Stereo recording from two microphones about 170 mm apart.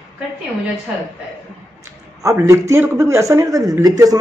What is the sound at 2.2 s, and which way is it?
A man's voice, 20° right (ahead or behind).